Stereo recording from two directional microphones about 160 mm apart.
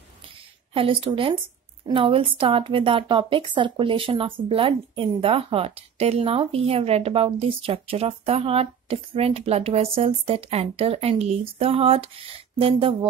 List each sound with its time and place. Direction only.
0.7 s a woman's voice: 35° right (ahead or behind)